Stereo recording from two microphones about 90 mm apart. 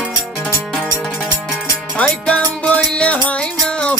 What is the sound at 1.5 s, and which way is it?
Music, 15° left (ahead or behind).